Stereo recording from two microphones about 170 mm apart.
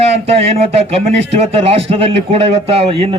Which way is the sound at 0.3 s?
35° right (ahead or behind).